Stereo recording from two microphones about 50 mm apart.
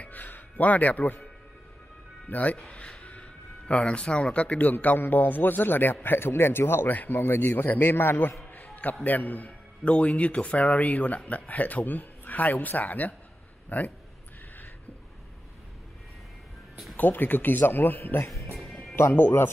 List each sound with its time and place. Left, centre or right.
0.0 s speech: left
2.2 s speech: left
4.6 s a man's voice: left
6.9 s a man's voice: left
9.0 s a man's voice: left
16.9 s speech: left
18.6 s music: centre